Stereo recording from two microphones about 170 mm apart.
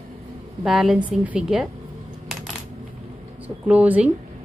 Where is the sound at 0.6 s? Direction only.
Centre (ahead or behind).